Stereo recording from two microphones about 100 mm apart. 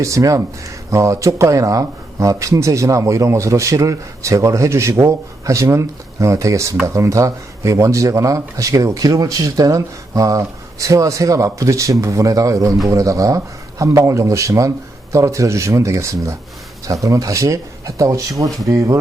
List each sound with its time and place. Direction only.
0.0 s speech: 30° right (ahead or behind)